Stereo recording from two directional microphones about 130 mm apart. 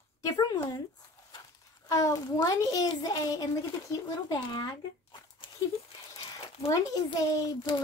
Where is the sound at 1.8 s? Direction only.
25° left (ahead or behind).